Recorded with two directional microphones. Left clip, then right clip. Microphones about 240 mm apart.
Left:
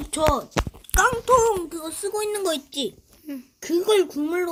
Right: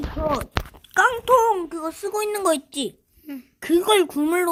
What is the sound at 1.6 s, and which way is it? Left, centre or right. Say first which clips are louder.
Speech: right 2 dB; right.